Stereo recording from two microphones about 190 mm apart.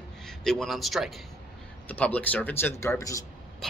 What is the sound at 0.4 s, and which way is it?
A man's voice, centre (ahead or behind).